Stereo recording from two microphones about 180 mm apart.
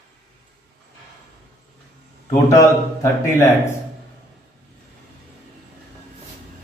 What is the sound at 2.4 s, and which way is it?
A man's voice, 15° left (ahead or behind).